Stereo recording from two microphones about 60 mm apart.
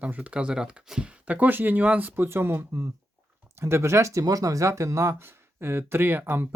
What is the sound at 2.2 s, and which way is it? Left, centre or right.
Speech, right.